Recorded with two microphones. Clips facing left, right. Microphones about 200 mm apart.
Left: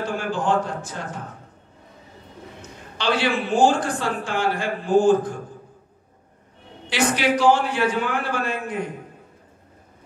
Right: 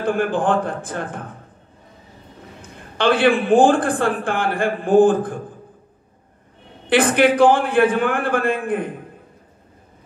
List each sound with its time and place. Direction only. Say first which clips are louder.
0.0 s a man's voice: right 6 dB; 55° right (ahead or behind)
2.6 s a man's voice: right 7 dB; 55° right (ahead or behind)
6.9 s a man's voice: right 6 dB; 55° right (ahead or behind)